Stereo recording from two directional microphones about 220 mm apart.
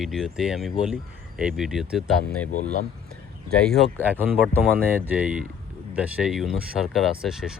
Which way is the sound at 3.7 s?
5° right (ahead or behind).